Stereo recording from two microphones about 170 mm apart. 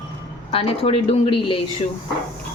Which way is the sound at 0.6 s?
35° left (ahead or behind).